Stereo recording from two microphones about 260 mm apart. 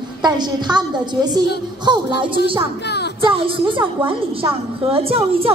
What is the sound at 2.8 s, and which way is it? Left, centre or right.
Music, left.